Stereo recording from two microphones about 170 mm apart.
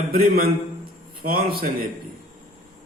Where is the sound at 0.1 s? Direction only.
60° right (ahead or behind).